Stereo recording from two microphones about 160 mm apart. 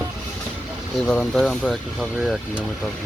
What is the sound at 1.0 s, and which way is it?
Speech, 5° left (ahead or behind).